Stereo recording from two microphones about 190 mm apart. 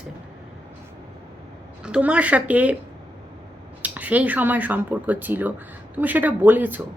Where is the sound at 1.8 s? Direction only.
5° right (ahead or behind).